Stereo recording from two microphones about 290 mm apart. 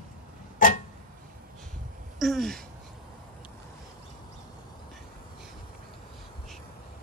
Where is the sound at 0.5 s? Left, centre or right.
Left.